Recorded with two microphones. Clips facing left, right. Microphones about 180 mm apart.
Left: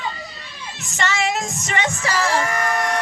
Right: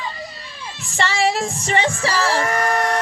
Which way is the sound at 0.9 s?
35° right (ahead or behind).